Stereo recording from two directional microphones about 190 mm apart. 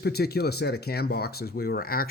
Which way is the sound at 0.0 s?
55° left (ahead or behind).